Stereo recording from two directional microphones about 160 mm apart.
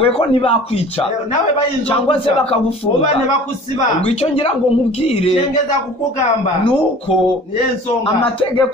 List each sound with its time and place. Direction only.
0.0 s speech: 35° left (ahead or behind)
2.0 s speech: 35° left (ahead or behind)
4.0 s speech: 35° left (ahead or behind)
8.2 s speech: 30° left (ahead or behind)